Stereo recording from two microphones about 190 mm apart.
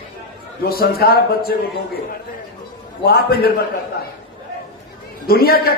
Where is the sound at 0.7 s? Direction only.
55° left (ahead or behind).